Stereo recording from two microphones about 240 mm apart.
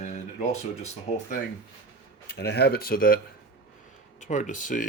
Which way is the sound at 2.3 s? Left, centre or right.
Left.